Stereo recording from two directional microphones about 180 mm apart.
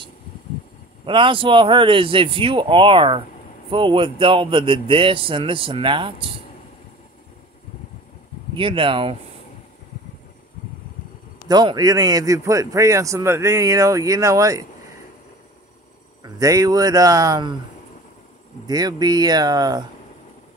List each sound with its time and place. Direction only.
1.0 s a man's voice: 30° right (ahead or behind)
8.5 s a man's voice: 30° right (ahead or behind)
11.4 s a man's voice: 20° right (ahead or behind)
16.2 s a man's voice: 20° right (ahead or behind)
18.7 s a man's voice: 20° right (ahead or behind)